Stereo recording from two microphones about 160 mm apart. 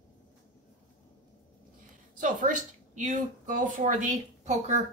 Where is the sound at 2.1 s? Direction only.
55° right (ahead or behind).